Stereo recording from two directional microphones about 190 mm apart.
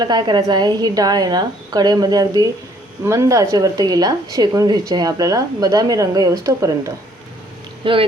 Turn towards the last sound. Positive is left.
turn(degrees=-25)  # may be behind; listen again after turning